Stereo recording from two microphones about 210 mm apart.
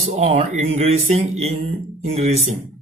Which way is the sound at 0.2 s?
30° right (ahead or behind).